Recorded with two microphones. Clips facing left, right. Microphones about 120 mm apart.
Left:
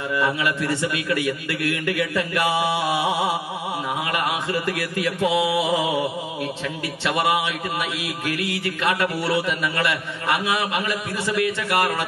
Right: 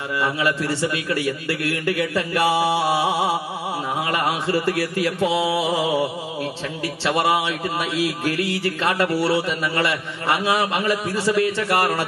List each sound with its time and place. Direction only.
0.2 s a man's voice: 30° right (ahead or behind)
4.1 s a man's voice: 30° right (ahead or behind)
7.1 s a man's voice: 30° right (ahead or behind)